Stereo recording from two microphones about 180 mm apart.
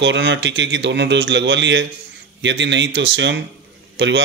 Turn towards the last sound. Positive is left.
turn(degrees=-85)